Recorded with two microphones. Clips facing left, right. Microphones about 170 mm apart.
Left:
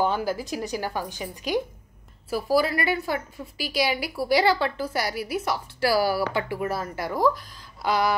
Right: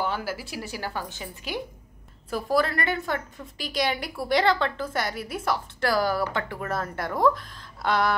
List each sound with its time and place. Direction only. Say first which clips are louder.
0.0 s a woman's voice: left 5 dB; 20° left (ahead or behind)
2.2 s a woman's voice: left 2 dB; 5° left (ahead or behind)
7.8 s a sound: left 1 dB; 5° left (ahead or behind)